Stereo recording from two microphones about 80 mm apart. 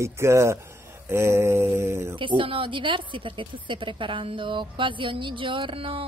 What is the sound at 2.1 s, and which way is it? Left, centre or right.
Speech, right.